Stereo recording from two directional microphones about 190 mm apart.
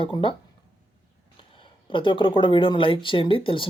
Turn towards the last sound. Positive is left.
turn(degrees=25)  # may be behind; listen again after turning